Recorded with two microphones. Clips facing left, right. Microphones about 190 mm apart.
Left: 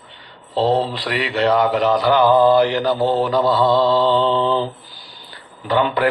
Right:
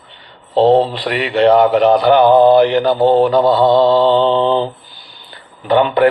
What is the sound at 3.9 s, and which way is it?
Mantra, 60° right (ahead or behind).